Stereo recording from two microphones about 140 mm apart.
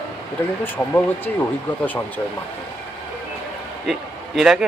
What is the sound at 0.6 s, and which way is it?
Speech, 15° left (ahead or behind).